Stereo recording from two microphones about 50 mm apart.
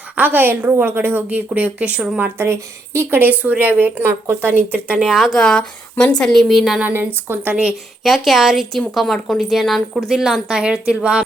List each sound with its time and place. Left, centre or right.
0.2 s a woman's voice: right
1.3 s a woman's voice: right
2.2 s speech: right
3.2 s a woman's voice: right
4.0 s a woman's voice: right
4.9 s a woman's voice: centre
5.2 s speech: centre
6.5 s a woman's voice: centre
6.9 s a woman's voice: right
7.5 s a woman's voice: right
8.0 s a woman's voice: centre
10.2 s a woman's voice: centre
10.6 s a woman's voice: centre